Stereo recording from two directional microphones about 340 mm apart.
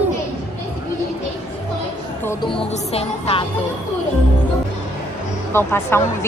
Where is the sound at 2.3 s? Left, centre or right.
Centre.